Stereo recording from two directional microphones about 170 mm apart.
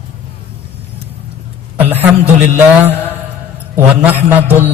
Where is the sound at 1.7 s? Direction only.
10° right (ahead or behind).